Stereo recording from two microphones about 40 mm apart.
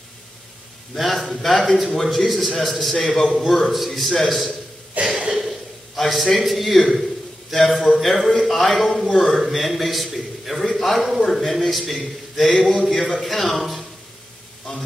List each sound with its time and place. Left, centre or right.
0.9 s a man's voice: centre
5.0 s a sound: right
5.9 s a man's voice: centre